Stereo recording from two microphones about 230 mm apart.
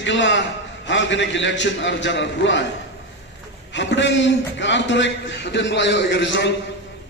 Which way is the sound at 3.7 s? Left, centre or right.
Left.